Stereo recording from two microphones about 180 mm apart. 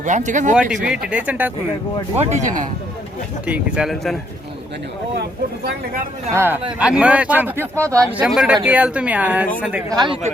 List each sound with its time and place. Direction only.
0.0 s speech: 40° right (ahead or behind)
0.5 s a man's voice: 5° right (ahead or behind)
2.1 s speech: 40° right (ahead or behind)
3.4 s speech: 5° right (ahead or behind)
5.6 s speech: 55° right (ahead or behind)
6.3 s a man's voice: 10° right (ahead or behind)
8.2 s a man's voice: 5° right (ahead or behind)
9.9 s speech: 25° right (ahead or behind)